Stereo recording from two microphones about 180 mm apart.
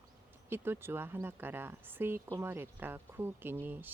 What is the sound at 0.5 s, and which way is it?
Speech, 10° right (ahead or behind).